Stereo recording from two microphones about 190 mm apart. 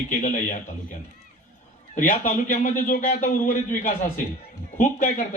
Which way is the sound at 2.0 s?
45° left (ahead or behind).